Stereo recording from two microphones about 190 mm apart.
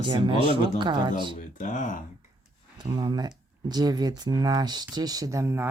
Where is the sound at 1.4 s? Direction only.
45° left (ahead or behind).